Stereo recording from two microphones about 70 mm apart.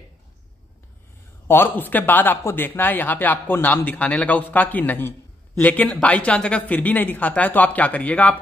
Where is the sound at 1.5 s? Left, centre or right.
Left.